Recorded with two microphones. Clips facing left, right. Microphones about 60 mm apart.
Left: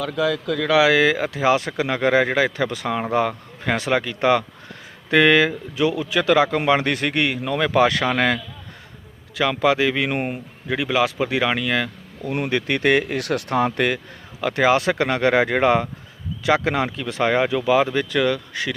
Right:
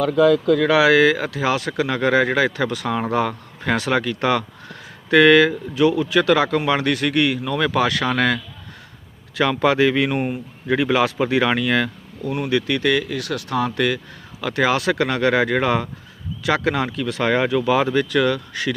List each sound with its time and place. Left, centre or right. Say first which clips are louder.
0.0 s speech: right 7 dB; right
0.8 s speech: right 2 dB; centre
9.4 s speech: right 2 dB; centre
10.2 s speech: right 2 dB; left
10.7 s a man's voice: right 5 dB; centre
10.9 s speech: left 1 dB; centre
12.3 s speech: right 1 dB; left
13.6 s speech: right 1 dB; left
14.4 s speech: left 1 dB; centre